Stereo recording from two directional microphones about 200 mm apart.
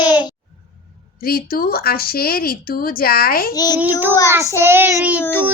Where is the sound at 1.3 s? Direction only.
50° left (ahead or behind).